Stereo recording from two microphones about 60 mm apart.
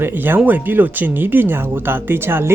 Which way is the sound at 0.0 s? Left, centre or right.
Right.